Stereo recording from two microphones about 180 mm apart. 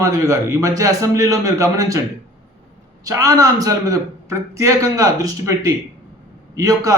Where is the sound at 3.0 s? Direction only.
20° right (ahead or behind).